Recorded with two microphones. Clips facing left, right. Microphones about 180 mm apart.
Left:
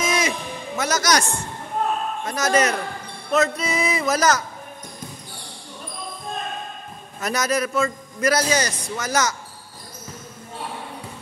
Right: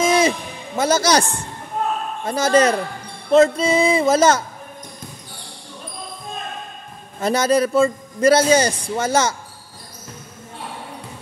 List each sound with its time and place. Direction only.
0.0 s music: 30° right (ahead or behind)
0.7 s a man's voice: 30° right (ahead or behind)
7.2 s a man's voice: 30° right (ahead or behind)